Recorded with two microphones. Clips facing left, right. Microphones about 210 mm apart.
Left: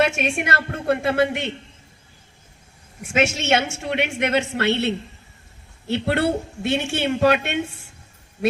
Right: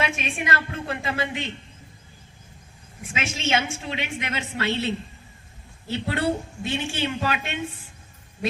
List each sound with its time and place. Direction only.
0.0 s a woman's voice: 70° left (ahead or behind)
3.1 s a woman's voice: 70° left (ahead or behind)